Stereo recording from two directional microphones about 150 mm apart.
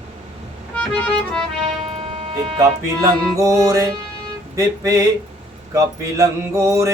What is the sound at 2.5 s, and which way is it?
Mantra, 20° right (ahead or behind).